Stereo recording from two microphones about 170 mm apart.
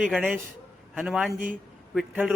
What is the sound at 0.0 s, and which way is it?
A man's voice, 5° right (ahead or behind).